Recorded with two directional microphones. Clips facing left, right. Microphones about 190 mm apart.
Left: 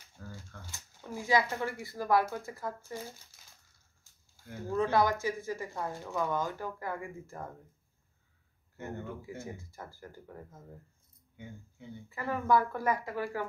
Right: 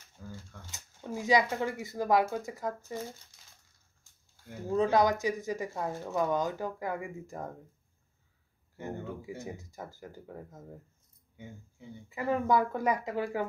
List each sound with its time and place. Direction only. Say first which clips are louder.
0.2 s typewriter: right 2 dB; 5° right (ahead or behind)
0.7 s speech: right 5 dB; 20° right (ahead or behind)
4.6 s speech: right 2 dB; 20° right (ahead or behind)
8.7 s speech: right 2 dB; 15° right (ahead or behind)
12.1 s speech: right 1 dB; 20° right (ahead or behind)